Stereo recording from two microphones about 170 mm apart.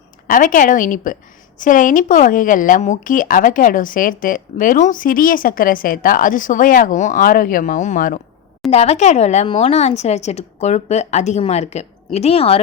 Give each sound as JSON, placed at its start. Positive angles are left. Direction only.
{"t": 0.3, "sound": "a woman's voice", "side_deg": 55}
{"t": 8.7, "sound": "speech", "side_deg": 40}